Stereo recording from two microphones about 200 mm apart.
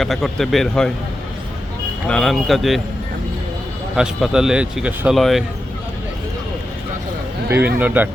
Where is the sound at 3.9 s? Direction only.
5° right (ahead or behind).